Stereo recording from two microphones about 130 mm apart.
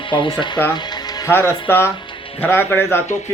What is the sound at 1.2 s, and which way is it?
A man's voice, 15° left (ahead or behind).